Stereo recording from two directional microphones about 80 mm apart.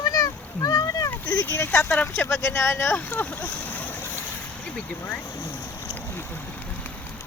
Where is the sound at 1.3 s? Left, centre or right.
Left.